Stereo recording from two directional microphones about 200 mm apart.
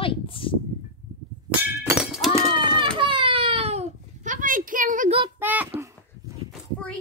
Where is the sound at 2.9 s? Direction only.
25° right (ahead or behind); by 5.2 s 40° right (ahead or behind).